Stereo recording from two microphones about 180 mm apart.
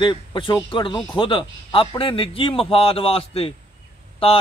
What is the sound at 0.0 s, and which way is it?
Speech, 25° left (ahead or behind).